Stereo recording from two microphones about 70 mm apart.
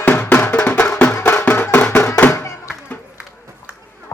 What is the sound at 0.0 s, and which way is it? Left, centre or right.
Music, left.